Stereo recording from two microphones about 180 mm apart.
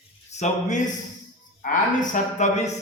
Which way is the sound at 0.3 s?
40° left (ahead or behind).